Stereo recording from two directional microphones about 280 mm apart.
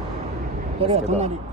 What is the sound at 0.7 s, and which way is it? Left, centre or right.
Speech, right.